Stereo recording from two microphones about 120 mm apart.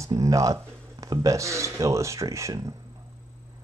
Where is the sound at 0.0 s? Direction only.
25° right (ahead or behind).